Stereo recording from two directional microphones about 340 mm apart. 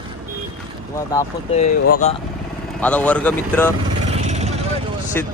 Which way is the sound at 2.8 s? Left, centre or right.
Centre.